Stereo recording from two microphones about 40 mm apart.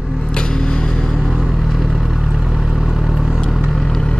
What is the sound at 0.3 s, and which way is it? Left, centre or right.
Vehicle, left.